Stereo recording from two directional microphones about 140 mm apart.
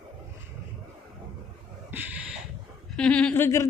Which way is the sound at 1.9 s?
15° right (ahead or behind).